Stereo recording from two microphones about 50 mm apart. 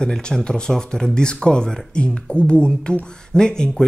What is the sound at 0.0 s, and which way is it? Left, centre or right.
Speech, centre.